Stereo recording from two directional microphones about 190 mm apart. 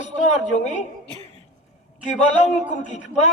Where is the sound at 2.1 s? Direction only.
35° left (ahead or behind).